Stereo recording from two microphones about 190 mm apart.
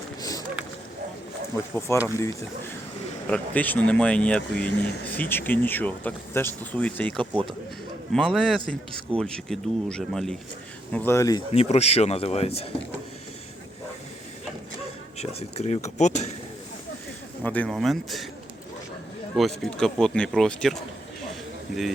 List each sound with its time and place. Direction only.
0.2 s a sound: 20° left (ahead or behind)
1.9 s speech: 15° left (ahead or behind)
3.2 s speech: 5° left (ahead or behind)
10.9 s speech: 10° left (ahead or behind)
11.5 s speech: 30° left (ahead or behind)
15.2 s speech: 35° left (ahead or behind)
17.4 s speech: 10° left (ahead or behind)
19.4 s speech: centre (ahead or behind)